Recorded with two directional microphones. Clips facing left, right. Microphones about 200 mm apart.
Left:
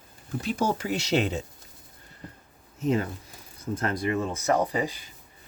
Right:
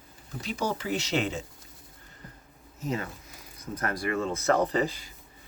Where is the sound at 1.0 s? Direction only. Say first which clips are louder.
Left 6 dB; 40° left (ahead or behind).